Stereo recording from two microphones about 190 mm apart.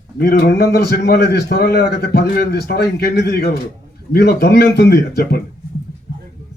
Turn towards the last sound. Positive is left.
turn(degrees=55)  # may be behind; listen again after turning